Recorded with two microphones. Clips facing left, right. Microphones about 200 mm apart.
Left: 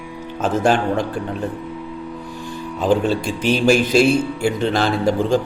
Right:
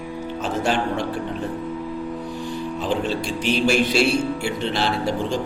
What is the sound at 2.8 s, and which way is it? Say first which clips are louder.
A man's voice: left 8 dB; 45° left (ahead or behind).